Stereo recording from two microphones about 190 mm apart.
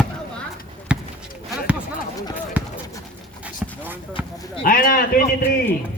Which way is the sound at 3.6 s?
10° right (ahead or behind).